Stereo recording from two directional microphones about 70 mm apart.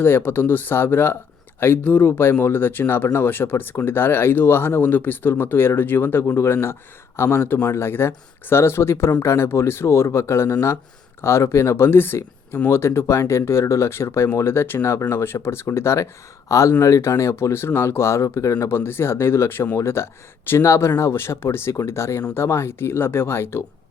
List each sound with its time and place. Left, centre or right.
0.0 s speech: left
18.8 s speech: left